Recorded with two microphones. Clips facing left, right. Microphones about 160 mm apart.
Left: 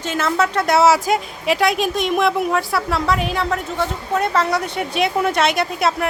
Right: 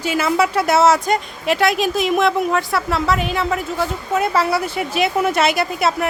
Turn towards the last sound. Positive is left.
turn(degrees=0)  # may be behind; listen again after turning